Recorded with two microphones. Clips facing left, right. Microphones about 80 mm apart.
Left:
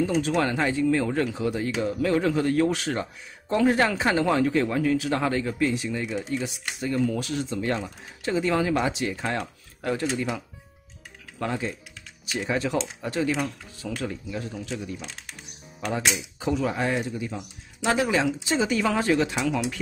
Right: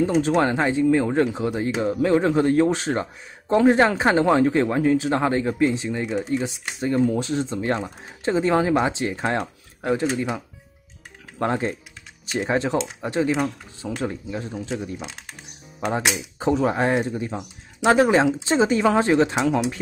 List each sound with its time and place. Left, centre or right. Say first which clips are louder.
0.0 s speech: right 4 dB; right
11.3 s speech: right 6 dB; right
16.3 s speech: right 7 dB; right